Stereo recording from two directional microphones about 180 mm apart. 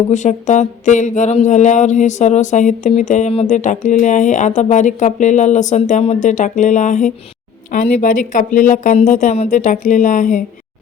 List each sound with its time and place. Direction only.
0.1 s mantra: 40° left (ahead or behind)